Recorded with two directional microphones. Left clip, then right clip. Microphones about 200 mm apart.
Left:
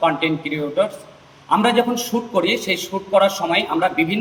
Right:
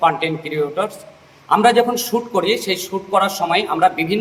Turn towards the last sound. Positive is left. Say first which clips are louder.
# right 3 dB
turn(degrees=-15)  # may be behind; listen again after turning